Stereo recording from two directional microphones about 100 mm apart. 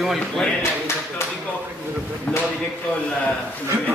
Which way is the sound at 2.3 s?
10° left (ahead or behind).